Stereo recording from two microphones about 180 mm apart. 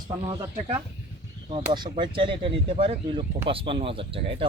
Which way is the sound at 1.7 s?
25° right (ahead or behind).